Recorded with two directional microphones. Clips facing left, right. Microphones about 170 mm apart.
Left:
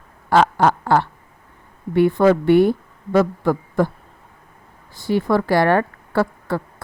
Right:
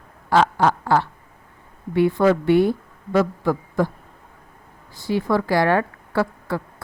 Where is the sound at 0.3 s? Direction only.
55° left (ahead or behind).